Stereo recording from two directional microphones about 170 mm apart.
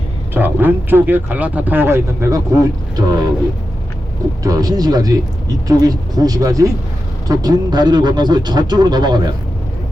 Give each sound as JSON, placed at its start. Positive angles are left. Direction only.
{"t": 0.3, "sound": "speech", "side_deg": -10}
{"t": 4.4, "sound": "speech", "side_deg": -20}